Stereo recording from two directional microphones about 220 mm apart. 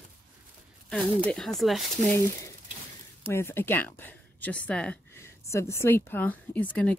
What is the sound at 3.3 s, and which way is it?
Speech, 10° left (ahead or behind).